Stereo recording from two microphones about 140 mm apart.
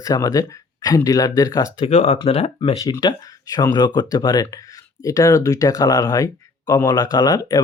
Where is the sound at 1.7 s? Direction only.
45° left (ahead or behind).